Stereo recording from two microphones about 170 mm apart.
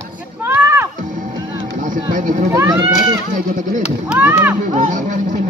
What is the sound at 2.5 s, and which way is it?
Goat, 20° right (ahead or behind).